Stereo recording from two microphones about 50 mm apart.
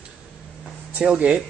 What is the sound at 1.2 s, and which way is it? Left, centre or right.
Speech, right.